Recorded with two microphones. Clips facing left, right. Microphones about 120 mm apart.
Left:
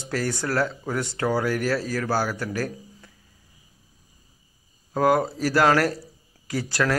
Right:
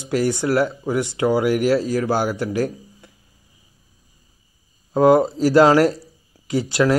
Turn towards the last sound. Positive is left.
turn(degrees=-20)  # may be behind; listen again after turning